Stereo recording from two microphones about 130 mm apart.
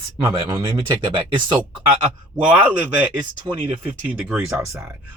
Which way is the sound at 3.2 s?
40° right (ahead or behind).